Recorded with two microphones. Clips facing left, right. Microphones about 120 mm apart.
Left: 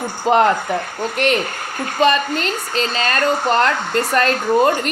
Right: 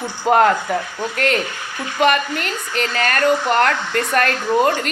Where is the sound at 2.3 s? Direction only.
25° left (ahead or behind).